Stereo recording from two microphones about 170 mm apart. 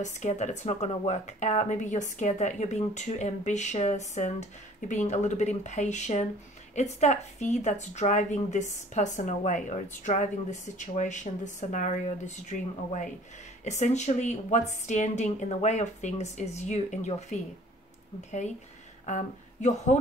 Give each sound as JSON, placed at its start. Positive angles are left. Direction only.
{"t": 0.0, "sound": "speech", "side_deg": 45}
{"t": 19.0, "sound": "speech", "side_deg": 45}